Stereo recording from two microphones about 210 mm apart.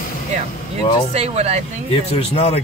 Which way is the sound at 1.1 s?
30° right (ahead or behind).